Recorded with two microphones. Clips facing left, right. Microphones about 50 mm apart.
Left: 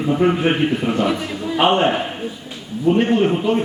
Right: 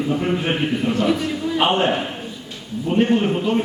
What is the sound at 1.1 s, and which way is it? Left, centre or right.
A man's voice, centre.